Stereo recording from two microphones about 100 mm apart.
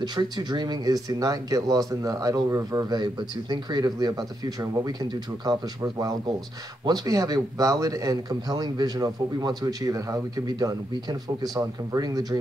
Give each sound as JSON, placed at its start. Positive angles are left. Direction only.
{"t": 0.0, "sound": "speech", "side_deg": -45}